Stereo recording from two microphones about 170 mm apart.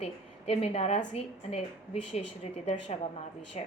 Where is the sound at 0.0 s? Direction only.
35° left (ahead or behind).